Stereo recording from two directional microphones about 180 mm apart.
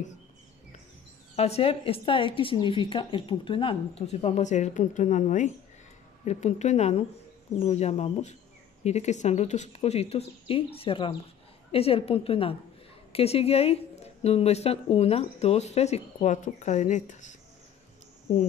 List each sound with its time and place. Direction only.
1.3 s a woman's voice: 35° left (ahead or behind)